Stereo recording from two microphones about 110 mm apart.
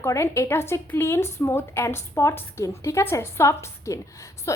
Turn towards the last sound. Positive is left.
turn(degrees=30)  # may be behind; listen again after turning